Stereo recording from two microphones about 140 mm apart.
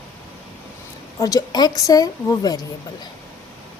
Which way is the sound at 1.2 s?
25° left (ahead or behind).